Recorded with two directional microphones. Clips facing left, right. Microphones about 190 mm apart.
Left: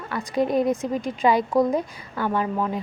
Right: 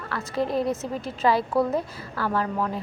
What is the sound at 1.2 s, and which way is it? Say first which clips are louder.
A woman's voice: left 2 dB; 15° left (ahead or behind).